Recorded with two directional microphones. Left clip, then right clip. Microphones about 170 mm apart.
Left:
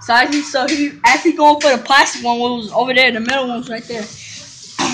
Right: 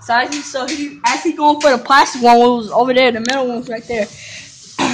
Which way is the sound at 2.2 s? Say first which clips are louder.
Right 8 dB; 45° right (ahead or behind).